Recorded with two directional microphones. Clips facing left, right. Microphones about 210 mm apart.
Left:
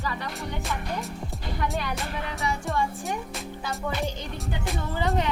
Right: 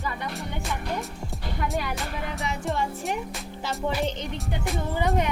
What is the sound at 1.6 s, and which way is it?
Speech, centre (ahead or behind).